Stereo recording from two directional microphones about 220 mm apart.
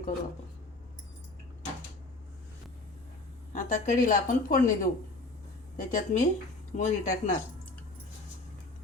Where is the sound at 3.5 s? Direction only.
35° left (ahead or behind).